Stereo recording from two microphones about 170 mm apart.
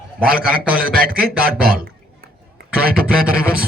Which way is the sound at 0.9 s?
60° right (ahead or behind).